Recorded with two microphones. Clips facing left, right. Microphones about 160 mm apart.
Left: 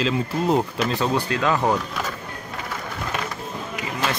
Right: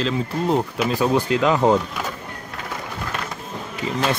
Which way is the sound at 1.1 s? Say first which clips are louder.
Right 3 dB; 20° right (ahead or behind).